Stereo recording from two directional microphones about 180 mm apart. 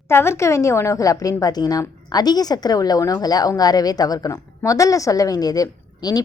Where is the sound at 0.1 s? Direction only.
15° left (ahead or behind).